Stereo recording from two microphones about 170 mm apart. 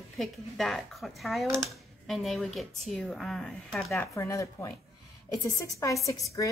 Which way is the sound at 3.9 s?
15° left (ahead or behind).